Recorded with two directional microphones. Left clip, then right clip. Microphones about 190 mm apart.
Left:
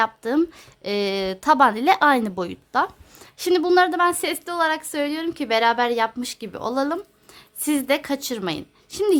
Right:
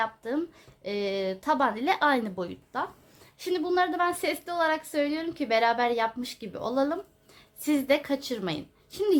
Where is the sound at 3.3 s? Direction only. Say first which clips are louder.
Left 9 dB; 60° left (ahead or behind).